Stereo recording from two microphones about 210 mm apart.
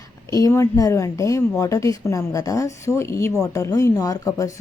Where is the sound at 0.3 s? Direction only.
15° left (ahead or behind).